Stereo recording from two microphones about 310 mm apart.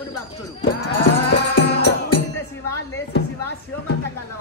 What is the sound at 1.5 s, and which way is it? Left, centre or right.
Music, left.